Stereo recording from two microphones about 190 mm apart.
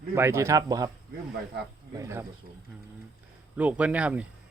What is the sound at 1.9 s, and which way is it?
Speech, 15° right (ahead or behind).